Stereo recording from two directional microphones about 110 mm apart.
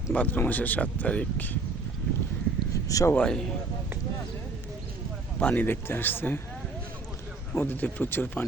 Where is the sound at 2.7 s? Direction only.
30° left (ahead or behind).